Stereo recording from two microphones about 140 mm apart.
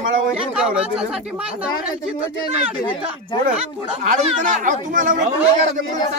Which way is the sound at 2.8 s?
35° left (ahead or behind).